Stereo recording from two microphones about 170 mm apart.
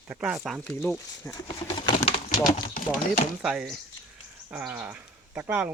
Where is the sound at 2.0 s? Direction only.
45° left (ahead or behind).